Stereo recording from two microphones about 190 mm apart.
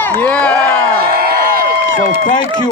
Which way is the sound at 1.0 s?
50° right (ahead or behind).